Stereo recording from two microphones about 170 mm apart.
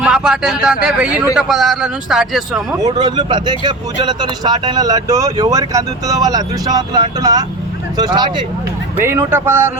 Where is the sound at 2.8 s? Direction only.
25° right (ahead or behind).